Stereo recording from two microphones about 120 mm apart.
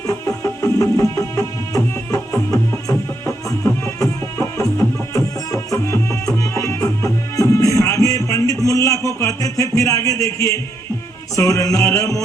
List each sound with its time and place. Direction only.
0.1 s music: 25° left (ahead or behind)